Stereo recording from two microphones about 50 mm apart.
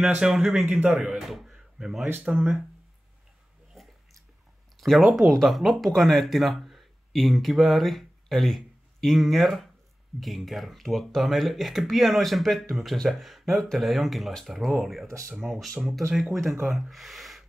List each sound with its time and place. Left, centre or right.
0.2 s speech: centre
2.2 s speech: right
4.7 s speech: centre
16.9 s a sound: centre